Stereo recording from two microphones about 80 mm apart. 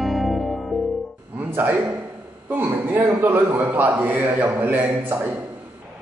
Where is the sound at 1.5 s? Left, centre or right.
Right.